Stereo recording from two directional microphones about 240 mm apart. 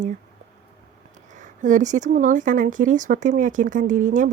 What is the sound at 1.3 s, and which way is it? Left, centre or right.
Speech, right.